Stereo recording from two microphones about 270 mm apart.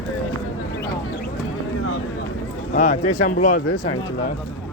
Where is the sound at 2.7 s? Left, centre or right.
Left.